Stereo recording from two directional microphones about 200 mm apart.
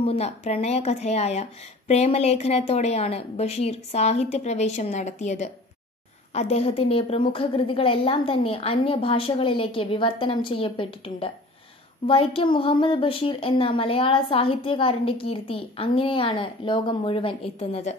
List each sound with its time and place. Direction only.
0.0 s a woman's voice: 30° left (ahead or behind)